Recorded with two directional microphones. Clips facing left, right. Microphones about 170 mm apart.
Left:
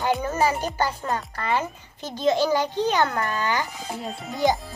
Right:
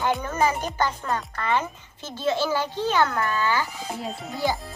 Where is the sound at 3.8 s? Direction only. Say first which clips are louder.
Even; centre (ahead or behind).